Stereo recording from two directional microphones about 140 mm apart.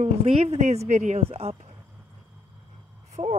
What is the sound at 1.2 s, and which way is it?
Speech, 45° right (ahead or behind).